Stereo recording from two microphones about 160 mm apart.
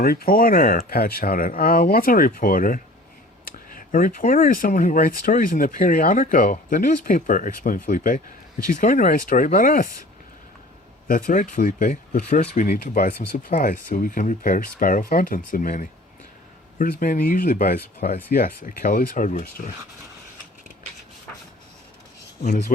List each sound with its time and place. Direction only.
0.0 s speech: 65° left (ahead or behind)
11.1 s speech: 55° left (ahead or behind)